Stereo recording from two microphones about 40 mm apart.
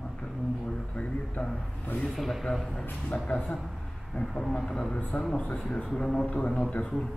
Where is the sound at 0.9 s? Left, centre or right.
Left.